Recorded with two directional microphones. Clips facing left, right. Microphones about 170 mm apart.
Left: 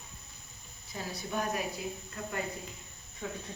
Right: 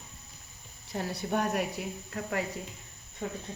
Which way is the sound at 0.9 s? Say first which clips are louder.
Right 5 dB; 65° right (ahead or behind).